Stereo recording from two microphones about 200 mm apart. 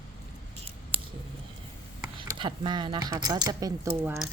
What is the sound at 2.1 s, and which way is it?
Speech, 25° right (ahead or behind).